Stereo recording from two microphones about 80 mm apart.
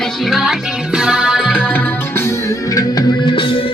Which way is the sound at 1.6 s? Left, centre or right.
Left.